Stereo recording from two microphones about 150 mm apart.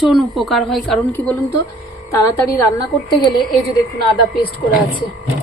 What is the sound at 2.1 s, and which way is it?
A woman's voice, 15° left (ahead or behind).